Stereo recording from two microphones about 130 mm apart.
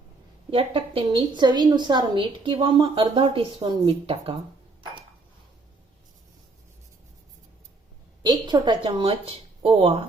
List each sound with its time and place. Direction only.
0.5 s a woman's voice: 40° right (ahead or behind)
8.2 s a woman's voice: 30° right (ahead or behind); by 9.9 s 50° right (ahead or behind)